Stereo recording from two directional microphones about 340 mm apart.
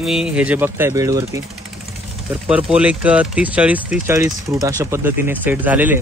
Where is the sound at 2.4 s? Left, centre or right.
Centre.